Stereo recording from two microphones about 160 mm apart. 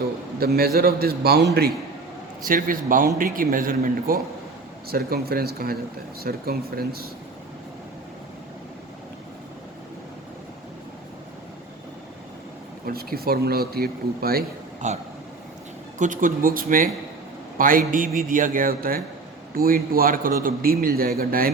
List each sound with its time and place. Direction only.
0.3 s speech: 70° right (ahead or behind)
2.4 s a man's voice: 60° right (ahead or behind)
12.8 s speech: 70° right (ahead or behind)
14.8 s a man's voice: 50° right (ahead or behind)